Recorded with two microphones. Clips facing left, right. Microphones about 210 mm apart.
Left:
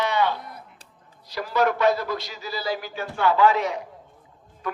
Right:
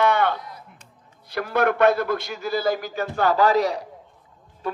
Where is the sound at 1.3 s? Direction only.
55° right (ahead or behind).